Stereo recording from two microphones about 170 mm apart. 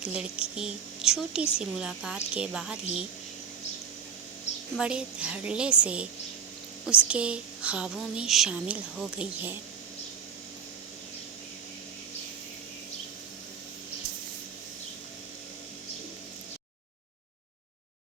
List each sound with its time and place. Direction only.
0.0 s speech: 5° right (ahead or behind)
4.8 s speech: 5° right (ahead or behind)